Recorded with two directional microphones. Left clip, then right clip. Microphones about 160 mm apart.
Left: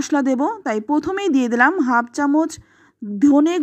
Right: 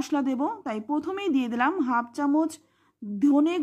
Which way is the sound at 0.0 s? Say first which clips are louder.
Left 8 dB; 30° left (ahead or behind).